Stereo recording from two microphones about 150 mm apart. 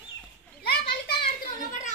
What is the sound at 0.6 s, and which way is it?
Children playing, 90° left.